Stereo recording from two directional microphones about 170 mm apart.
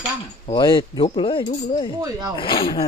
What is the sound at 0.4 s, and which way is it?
Speech, 30° left (ahead or behind).